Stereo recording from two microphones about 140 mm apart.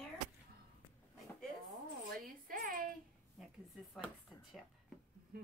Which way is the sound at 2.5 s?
90° right.